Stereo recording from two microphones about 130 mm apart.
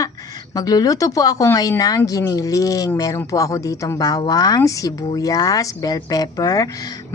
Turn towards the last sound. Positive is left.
turn(degrees=30)  # may be behind; listen again after turning